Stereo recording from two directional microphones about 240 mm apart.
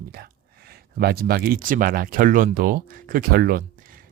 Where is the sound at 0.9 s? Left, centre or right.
Right.